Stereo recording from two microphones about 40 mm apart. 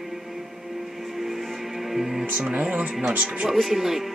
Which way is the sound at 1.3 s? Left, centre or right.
Centre.